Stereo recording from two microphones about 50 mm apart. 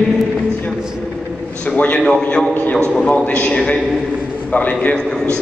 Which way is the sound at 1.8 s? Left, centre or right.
Left.